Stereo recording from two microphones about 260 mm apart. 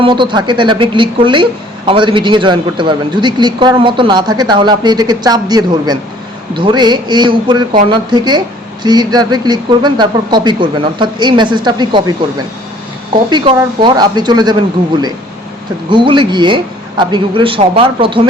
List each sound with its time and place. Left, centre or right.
0.0 s a woman's voice: centre
13.3 s a man's voice: centre
15.9 s a woman's voice: centre